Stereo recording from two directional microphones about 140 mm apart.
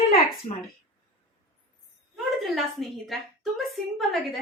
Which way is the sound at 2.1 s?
Centre (ahead or behind).